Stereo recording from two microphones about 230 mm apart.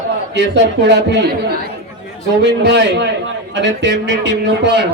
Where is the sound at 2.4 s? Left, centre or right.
Right.